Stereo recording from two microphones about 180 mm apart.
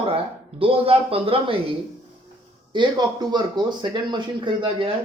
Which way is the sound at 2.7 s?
25° right (ahead or behind).